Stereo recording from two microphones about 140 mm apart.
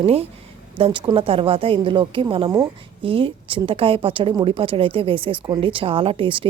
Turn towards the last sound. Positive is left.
turn(degrees=-40)  # may be behind; listen again after turning